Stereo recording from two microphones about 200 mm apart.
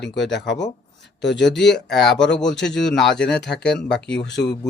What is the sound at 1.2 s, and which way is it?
Speech, 60° left (ahead or behind).